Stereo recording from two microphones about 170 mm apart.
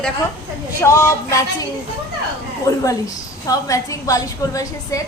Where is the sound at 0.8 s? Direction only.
15° left (ahead or behind).